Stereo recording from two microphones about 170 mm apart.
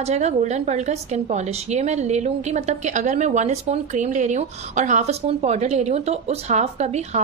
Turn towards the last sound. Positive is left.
turn(degrees=-40)  # may be behind; listen again after turning